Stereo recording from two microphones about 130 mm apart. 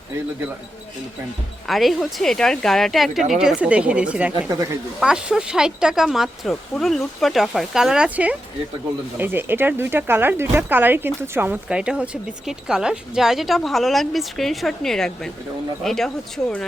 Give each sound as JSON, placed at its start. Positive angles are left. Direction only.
{"t": 1.6, "sound": "speech", "side_deg": 0}
{"t": 4.4, "sound": "speech", "side_deg": -20}
{"t": 4.9, "sound": "speech", "side_deg": -5}